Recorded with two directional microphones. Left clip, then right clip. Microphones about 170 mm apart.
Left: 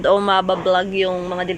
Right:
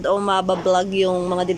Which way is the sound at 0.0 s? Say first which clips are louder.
Left 4 dB; 10° right (ahead or behind).